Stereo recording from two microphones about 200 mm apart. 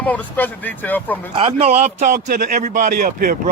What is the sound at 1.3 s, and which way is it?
Speech, 30° right (ahead or behind).